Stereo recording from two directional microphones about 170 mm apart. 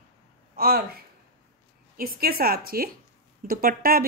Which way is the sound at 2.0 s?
60° right (ahead or behind).